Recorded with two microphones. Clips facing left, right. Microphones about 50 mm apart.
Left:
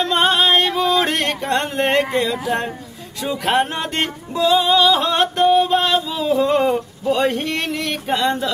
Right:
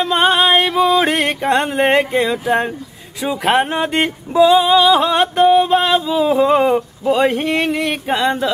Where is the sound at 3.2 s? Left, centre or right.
Centre.